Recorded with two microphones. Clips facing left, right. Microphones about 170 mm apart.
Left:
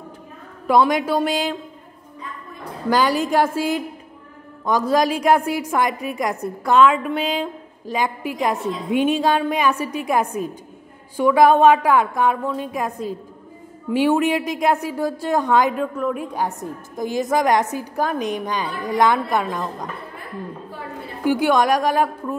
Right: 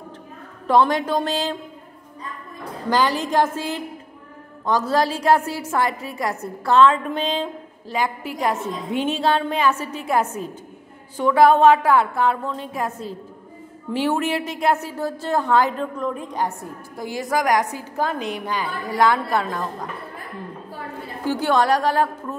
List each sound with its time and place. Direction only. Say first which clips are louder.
0.7 s a woman's voice: left 1 dB; 10° left (ahead or behind)
2.9 s a woman's voice: left 2 dB; 10° left (ahead or behind)
21.2 s a woman's voice: left 2 dB; 15° left (ahead or behind)